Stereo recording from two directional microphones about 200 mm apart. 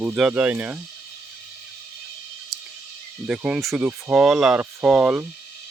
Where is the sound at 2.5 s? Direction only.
Centre (ahead or behind).